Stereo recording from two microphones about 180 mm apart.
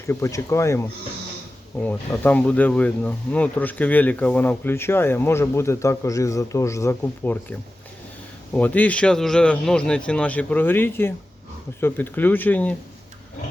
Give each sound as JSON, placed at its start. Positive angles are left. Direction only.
{"t": 0.1, "sound": "speech", "side_deg": 15}
{"t": 8.5, "sound": "speech", "side_deg": 10}